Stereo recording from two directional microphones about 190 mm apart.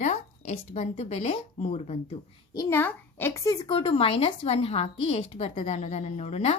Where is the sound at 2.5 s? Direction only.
15° left (ahead or behind); by 6.6 s 35° left (ahead or behind).